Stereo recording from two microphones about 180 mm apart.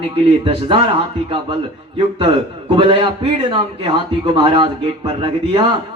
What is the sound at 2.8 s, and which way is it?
A man's voice, 30° right (ahead or behind).